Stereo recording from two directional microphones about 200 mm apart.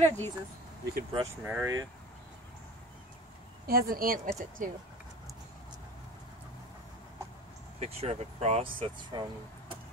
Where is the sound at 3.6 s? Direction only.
50° right (ahead or behind).